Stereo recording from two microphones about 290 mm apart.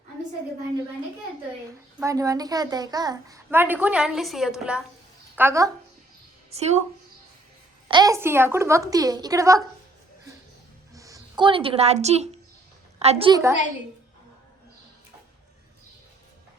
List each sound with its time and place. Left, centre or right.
2.0 s a child's voice: centre
6.5 s a woman's voice: right
7.9 s a child's voice: centre
10.9 s a child's voice: centre